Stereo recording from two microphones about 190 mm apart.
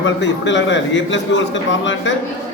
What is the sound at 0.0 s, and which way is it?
A man's voice, 70° left (ahead or behind).